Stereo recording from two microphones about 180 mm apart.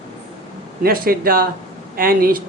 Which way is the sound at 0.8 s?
55° right (ahead or behind).